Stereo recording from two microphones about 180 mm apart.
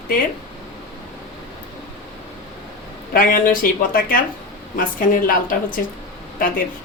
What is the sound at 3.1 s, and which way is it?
A woman's voice, 50° left (ahead or behind).